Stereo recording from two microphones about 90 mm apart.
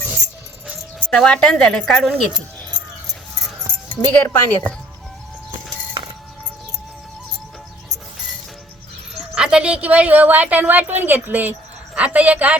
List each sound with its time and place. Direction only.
1.2 s a woman's voice: 10° left (ahead or behind)
3.8 s a woman's voice: 15° left (ahead or behind)
9.1 s a woman's voice: 10° right (ahead or behind)